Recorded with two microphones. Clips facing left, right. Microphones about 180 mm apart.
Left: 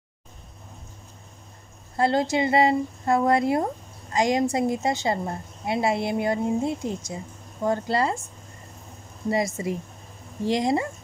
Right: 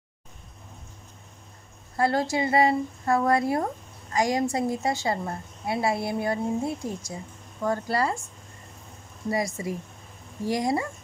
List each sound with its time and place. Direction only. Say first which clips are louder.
2.0 s a woman's voice: left 2 dB; 20° left (ahead or behind)
9.3 s a woman's voice: left 3 dB; 25° left (ahead or behind)